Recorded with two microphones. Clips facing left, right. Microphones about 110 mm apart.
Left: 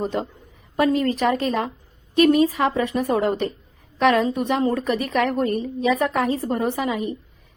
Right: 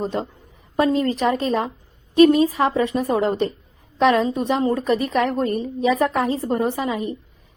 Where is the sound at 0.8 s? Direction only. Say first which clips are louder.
Right 1 dB; 25° right (ahead or behind).